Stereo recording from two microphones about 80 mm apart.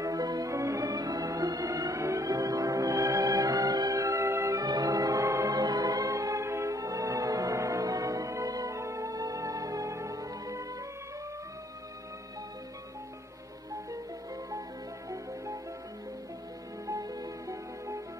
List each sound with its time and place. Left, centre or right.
0.0 s music: right
4.6 s music: right
15.0 s music: right
16.8 s music: right